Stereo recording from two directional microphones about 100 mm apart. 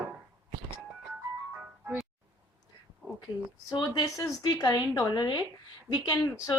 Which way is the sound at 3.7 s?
45° left (ahead or behind).